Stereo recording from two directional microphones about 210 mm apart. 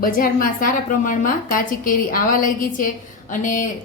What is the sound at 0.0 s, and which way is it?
A woman's voice, 40° left (ahead or behind).